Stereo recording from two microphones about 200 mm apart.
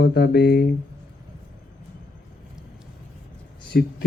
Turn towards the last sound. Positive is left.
turn(degrees=55)  # may be behind; listen again after turning